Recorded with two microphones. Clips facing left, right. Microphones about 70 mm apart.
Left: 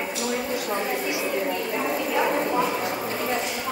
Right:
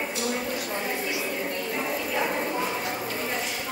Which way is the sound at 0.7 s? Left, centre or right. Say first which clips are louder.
Left 4 dB; centre.